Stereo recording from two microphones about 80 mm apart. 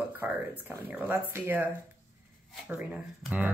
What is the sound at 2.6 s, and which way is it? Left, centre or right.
Speech, right.